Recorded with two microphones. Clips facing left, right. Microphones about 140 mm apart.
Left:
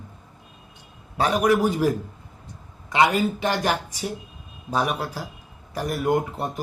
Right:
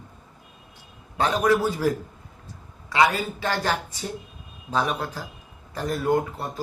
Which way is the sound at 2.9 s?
20° left (ahead or behind).